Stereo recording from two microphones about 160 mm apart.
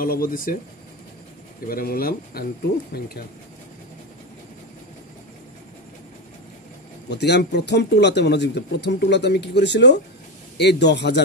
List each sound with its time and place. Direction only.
0.0 s speech: 65° left (ahead or behind)
1.7 s speech: 65° left (ahead or behind)
7.1 s speech: 90° left